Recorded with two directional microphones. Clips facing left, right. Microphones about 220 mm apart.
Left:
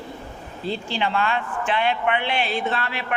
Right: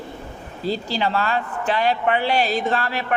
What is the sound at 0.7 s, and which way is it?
A man's voice, 40° right (ahead or behind).